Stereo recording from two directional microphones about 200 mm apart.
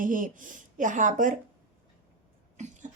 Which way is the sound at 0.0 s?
40° right (ahead or behind).